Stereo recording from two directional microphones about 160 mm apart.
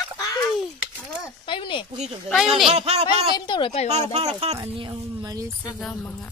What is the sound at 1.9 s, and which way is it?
Speech, 45° right (ahead or behind).